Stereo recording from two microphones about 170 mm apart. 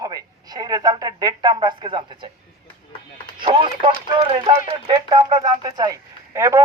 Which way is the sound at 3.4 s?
30° right (ahead or behind).